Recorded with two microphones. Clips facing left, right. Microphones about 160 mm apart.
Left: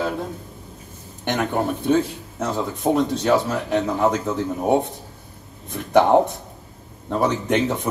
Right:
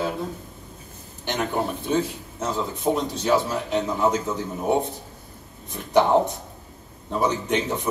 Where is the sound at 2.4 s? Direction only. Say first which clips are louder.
Left 2 dB; 55° left (ahead or behind).